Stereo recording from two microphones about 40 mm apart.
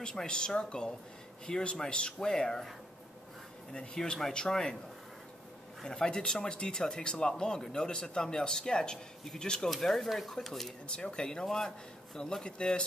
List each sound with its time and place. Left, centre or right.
0.0 s speech: centre
3.7 s speech: left
5.9 s speech: centre
10.9 s speech: left
12.4 s speech: left